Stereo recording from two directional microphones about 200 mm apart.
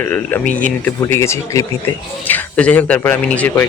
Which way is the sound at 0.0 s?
10° left (ahead or behind).